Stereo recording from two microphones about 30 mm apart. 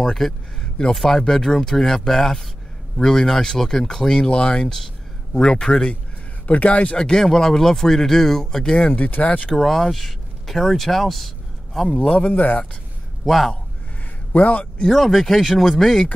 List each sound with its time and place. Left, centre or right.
0.0 s speech: centre
4.2 s speech: left
6.4 s a man's voice: left
7.2 s speech: centre
8.9 s speech: left
9.6 s speech: centre
12.2 s a man's voice: left
13.2 s a man's voice: centre
14.3 s a man's voice: left
14.9 s speech: centre